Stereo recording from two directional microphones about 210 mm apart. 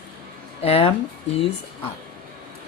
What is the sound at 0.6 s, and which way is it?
Speech, 30° left (ahead or behind).